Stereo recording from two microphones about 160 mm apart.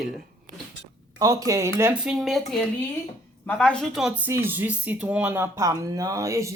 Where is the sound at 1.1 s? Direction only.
20° right (ahead or behind); by 2.4 s centre (ahead or behind).